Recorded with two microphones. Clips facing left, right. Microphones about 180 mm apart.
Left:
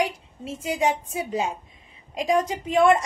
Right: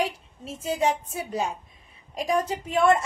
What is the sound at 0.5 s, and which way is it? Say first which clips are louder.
A woman's voice: left 1 dB; 15° left (ahead or behind).